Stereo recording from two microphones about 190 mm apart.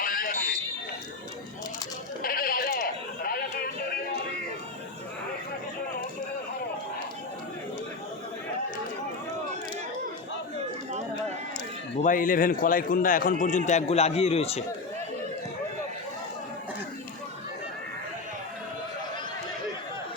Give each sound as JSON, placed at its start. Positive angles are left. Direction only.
{"t": 0.0, "sound": "fire alarm", "side_deg": 50}
{"t": 2.2, "sound": "sheep", "side_deg": 50}
{"t": 12.0, "sound": "a man's voice", "side_deg": 45}